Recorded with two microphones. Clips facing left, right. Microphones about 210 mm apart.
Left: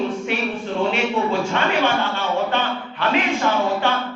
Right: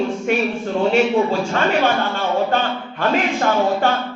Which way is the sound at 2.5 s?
45° right (ahead or behind).